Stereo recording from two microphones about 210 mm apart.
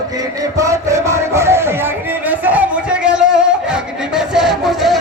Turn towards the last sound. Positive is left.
turn(degrees=0)  # may be behind; listen again after turning